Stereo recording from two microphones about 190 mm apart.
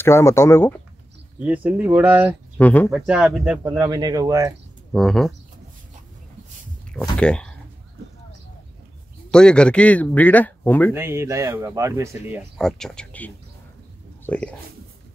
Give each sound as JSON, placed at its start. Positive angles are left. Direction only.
{"t": 0.0, "sound": "speech", "side_deg": 15}
{"t": 1.4, "sound": "speech", "side_deg": -10}
{"t": 2.5, "sound": "speech", "side_deg": 10}
{"t": 2.9, "sound": "speech", "side_deg": -5}
{"t": 3.7, "sound": "speech", "side_deg": -20}
{"t": 4.9, "sound": "speech", "side_deg": 0}
{"t": 6.9, "sound": "speech", "side_deg": 5}
{"t": 9.3, "sound": "speech", "side_deg": 5}
{"t": 10.9, "sound": "speech", "side_deg": -15}
{"t": 12.5, "sound": "speech", "side_deg": 0}